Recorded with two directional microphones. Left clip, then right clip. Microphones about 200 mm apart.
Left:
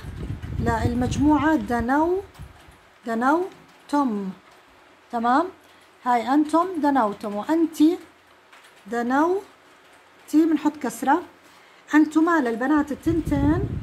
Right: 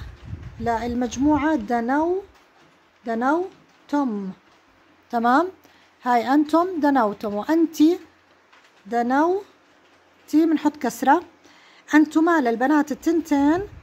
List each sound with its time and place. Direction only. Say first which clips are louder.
0.7 s a woman's voice: right 1 dB; 25° right (ahead or behind)
3.1 s a woman's voice: even; 25° right (ahead or behind)
5.1 s a woman's voice: right 2 dB; 35° right (ahead or behind)